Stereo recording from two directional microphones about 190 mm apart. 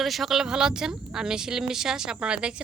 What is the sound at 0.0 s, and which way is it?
A woman's voice, centre (ahead or behind).